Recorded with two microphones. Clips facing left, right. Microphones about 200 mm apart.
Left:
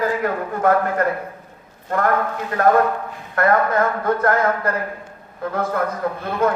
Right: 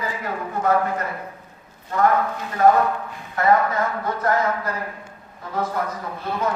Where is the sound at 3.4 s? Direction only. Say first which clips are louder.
Left 2 dB; 55° left (ahead or behind).